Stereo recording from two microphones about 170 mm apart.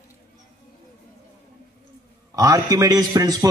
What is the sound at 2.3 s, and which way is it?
A man's voice, 20° right (ahead or behind).